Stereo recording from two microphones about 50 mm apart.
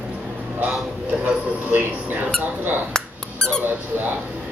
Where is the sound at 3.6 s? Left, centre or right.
Right.